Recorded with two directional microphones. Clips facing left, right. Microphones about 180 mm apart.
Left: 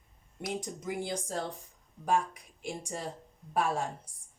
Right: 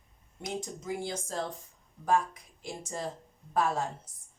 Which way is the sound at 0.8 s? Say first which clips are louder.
Even; 15° left (ahead or behind).